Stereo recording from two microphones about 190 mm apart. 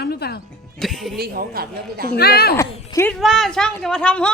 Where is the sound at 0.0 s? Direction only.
55° left (ahead or behind).